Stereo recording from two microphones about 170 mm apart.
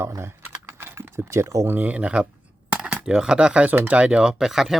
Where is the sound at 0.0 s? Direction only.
15° right (ahead or behind).